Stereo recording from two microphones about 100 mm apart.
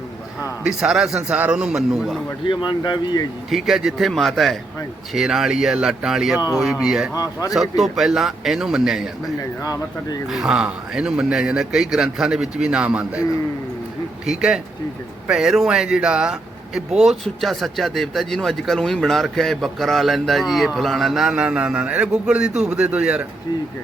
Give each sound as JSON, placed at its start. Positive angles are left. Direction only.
{"t": 0.6, "sound": "a man's voice", "side_deg": -5}
{"t": 2.5, "sound": "speech", "side_deg": 50}
{"t": 3.5, "sound": "a man's voice", "side_deg": -5}
{"t": 7.1, "sound": "speech", "side_deg": 35}
{"t": 7.5, "sound": "speech", "side_deg": 0}
{"t": 9.4, "sound": "speech", "side_deg": 35}
{"t": 10.2, "sound": "a man's voice", "side_deg": -5}
{"t": 14.3, "sound": "a man's voice", "side_deg": -5}